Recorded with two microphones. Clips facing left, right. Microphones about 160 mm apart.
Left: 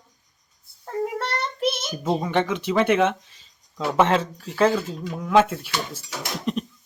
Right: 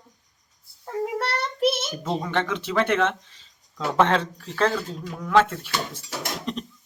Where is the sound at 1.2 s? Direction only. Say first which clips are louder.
Right 2 dB; 5° right (ahead or behind).